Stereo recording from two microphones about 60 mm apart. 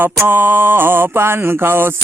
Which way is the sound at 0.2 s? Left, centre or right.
Right.